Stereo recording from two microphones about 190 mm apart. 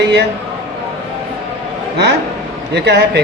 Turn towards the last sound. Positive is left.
turn(degrees=-60)  # may be behind; listen again after turning